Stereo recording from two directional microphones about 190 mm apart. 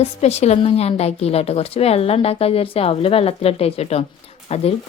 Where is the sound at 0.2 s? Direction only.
35° left (ahead or behind).